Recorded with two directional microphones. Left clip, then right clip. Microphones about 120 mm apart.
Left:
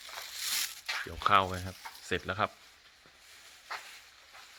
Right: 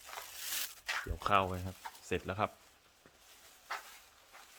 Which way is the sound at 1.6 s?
15° left (ahead or behind).